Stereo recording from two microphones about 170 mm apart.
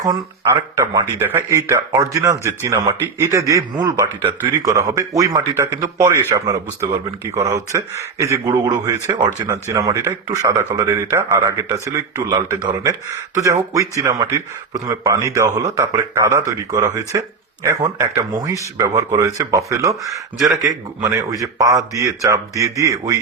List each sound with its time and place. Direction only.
1.2 s a man's voice: 15° right (ahead or behind)